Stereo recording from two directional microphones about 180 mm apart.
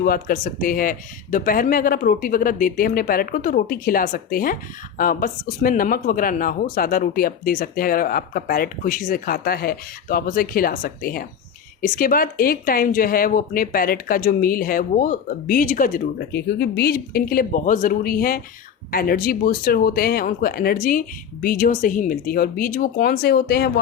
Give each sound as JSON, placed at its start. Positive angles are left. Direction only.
{"t": 0.0, "sound": "speech", "side_deg": 55}